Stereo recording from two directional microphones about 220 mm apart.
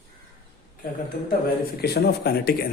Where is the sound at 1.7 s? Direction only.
45° left (ahead or behind).